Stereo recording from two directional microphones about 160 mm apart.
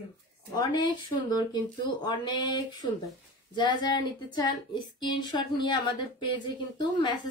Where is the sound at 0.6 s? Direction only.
25° left (ahead or behind).